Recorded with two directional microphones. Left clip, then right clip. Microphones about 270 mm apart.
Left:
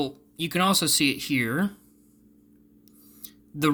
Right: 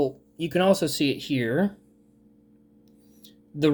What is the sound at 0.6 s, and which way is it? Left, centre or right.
Speech, left.